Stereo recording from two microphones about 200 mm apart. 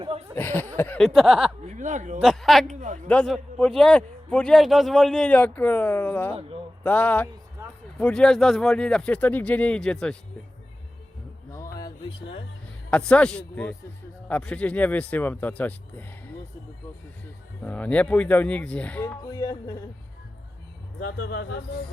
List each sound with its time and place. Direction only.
0.3 s speech: 10° left (ahead or behind)
1.6 s a sound: 35° right (ahead or behind)
2.1 s speech: centre (ahead or behind)
2.7 s a man's voice: 35° right (ahead or behind)
3.1 s speech: 5° left (ahead or behind)
7.6 s a sound: 15° right (ahead or behind)
7.9 s speech: 5° left (ahead or behind)
11.5 s a sound: 15° left (ahead or behind)
12.9 s speech: 5° left (ahead or behind)
17.6 s speech: 10° left (ahead or behind)
19.3 s speech: 20° left (ahead or behind)
21.0 s speech: 50° left (ahead or behind)